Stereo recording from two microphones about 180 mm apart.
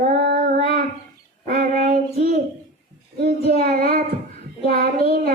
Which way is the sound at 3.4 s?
35° left (ahead or behind).